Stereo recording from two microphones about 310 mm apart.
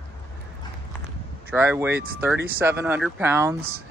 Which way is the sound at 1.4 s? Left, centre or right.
Centre.